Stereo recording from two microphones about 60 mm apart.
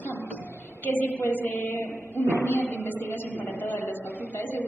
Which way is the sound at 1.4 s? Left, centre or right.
Left.